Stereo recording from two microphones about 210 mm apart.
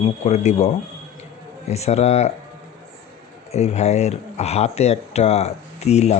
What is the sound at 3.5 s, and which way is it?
Speech, 30° left (ahead or behind).